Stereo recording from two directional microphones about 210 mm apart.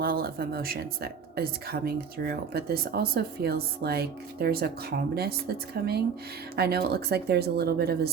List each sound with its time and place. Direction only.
0.0 s a woman's voice: 45° right (ahead or behind)